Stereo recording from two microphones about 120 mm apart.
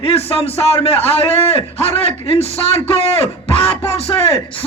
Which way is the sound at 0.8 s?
55° left (ahead or behind).